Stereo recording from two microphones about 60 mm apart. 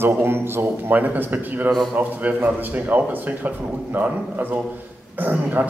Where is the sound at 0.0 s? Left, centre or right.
Right.